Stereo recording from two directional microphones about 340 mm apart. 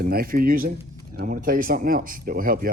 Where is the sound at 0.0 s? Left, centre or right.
Right.